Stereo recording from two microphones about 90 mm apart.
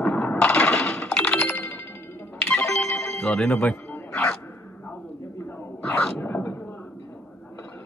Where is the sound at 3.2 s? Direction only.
5° left (ahead or behind).